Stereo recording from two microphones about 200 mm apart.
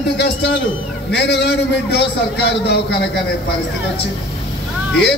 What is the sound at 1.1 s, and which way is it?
A man's voice, 55° left (ahead or behind).